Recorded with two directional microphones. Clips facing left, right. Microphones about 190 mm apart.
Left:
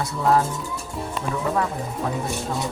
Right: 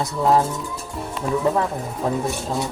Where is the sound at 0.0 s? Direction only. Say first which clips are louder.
Right 2 dB; 20° right (ahead or behind).